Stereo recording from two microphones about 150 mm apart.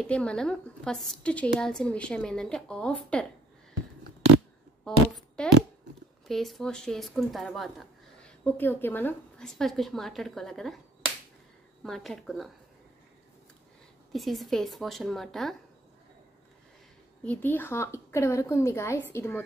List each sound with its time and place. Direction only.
0.0 s a woman's voice: 5° left (ahead or behind)
4.8 s a woman's voice: 5° left (ahead or behind)
8.2 s a woman's voice: 10° left (ahead or behind)
11.8 s a woman's voice: centre (ahead or behind)
14.1 s a woman's voice: centre (ahead or behind)
17.2 s a woman's voice: 10° left (ahead or behind)